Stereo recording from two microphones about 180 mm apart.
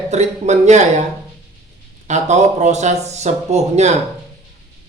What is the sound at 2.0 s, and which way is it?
Speech, 40° right (ahead or behind).